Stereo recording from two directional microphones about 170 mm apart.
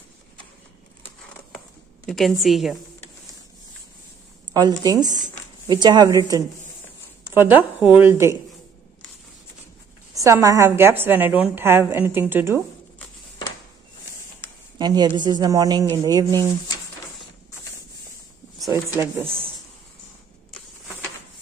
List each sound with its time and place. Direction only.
2.0 s a woman's voice: centre (ahead or behind)
4.6 s a woman's voice: 20° right (ahead or behind)
10.1 s a woman's voice: 20° right (ahead or behind)
14.8 s speech: 25° right (ahead or behind)
16.3 s speech: 20° left (ahead or behind)
18.7 s a woman's voice: 15° right (ahead or behind)